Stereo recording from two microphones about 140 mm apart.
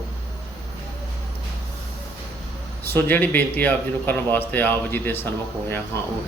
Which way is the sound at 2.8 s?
15° left (ahead or behind).